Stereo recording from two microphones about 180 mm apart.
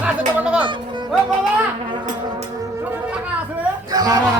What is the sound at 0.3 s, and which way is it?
Music, 10° right (ahead or behind).